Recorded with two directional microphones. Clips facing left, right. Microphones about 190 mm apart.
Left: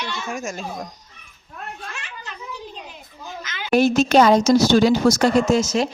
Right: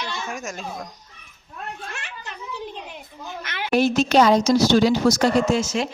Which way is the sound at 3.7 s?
45° left (ahead or behind).